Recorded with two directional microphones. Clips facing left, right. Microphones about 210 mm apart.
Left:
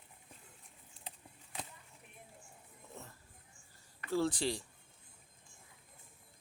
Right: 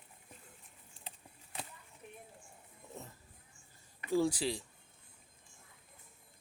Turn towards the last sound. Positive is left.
turn(degrees=0)  # may be behind; listen again after turning